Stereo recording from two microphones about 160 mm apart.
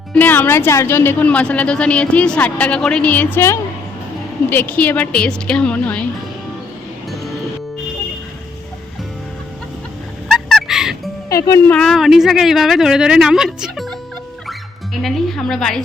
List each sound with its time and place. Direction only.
0.1 s speech: 10° left (ahead or behind)
10.3 s music: centre (ahead or behind)
11.3 s speech: 20° left (ahead or behind)
11.7 s speech: 5° left (ahead or behind)
15.0 s speech: centre (ahead or behind)